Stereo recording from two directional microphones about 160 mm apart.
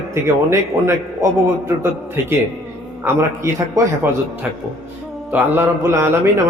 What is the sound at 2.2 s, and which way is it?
A man's voice, 15° right (ahead or behind).